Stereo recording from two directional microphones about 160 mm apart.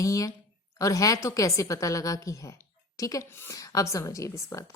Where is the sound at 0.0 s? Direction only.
20° left (ahead or behind).